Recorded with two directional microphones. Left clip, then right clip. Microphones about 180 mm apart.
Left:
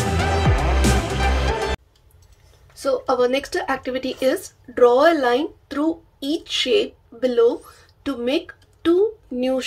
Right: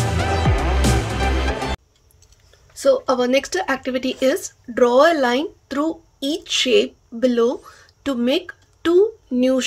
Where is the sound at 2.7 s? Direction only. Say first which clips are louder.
Right 4 dB; 45° right (ahead or behind).